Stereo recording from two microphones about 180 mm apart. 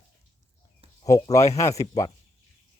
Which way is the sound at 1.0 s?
20° left (ahead or behind).